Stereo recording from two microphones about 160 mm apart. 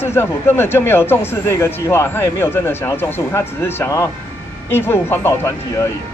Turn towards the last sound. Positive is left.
turn(degrees=15)  # may be behind; listen again after turning